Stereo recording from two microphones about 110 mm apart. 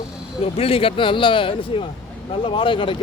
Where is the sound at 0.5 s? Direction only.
60° left (ahead or behind).